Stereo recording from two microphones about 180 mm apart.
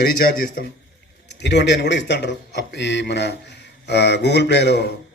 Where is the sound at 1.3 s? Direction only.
75° left (ahead or behind).